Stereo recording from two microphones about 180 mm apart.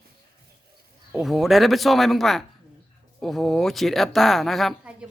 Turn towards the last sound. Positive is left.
turn(degrees=0)  # may be behind; listen again after turning